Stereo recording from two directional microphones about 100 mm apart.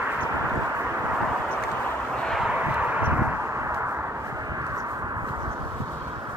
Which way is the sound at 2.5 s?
15° right (ahead or behind).